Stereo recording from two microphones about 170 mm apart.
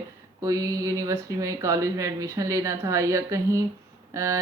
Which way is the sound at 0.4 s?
20° right (ahead or behind).